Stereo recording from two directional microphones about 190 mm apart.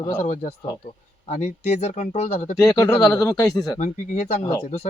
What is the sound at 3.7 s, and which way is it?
Speech, 40° left (ahead or behind).